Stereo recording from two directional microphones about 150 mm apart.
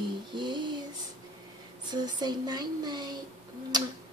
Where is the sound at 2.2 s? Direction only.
25° right (ahead or behind).